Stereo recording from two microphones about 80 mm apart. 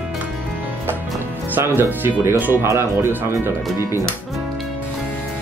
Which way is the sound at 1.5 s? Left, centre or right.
Right.